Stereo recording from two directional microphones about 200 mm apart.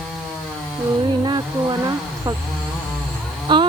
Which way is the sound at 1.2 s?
20° right (ahead or behind).